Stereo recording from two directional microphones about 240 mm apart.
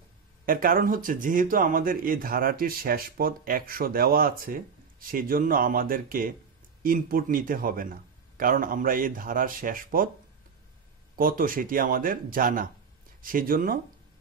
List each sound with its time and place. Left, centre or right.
0.5 s speech: right
11.1 s speech: right